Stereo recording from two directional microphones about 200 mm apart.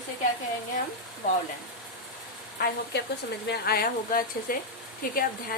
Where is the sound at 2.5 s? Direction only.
50° left (ahead or behind).